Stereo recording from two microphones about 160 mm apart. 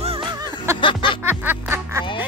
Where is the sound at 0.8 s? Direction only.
30° left (ahead or behind).